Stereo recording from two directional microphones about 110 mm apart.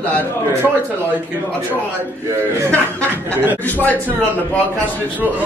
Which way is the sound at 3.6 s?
15° left (ahead or behind).